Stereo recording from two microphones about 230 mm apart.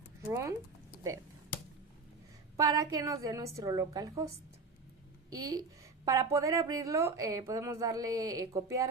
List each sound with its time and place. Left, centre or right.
0.3 s a woman's voice: centre
2.6 s a woman's voice: centre
5.3 s a woman's voice: centre